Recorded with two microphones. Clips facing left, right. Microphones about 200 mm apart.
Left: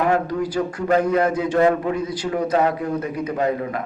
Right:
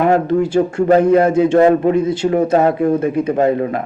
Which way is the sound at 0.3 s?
25° right (ahead or behind).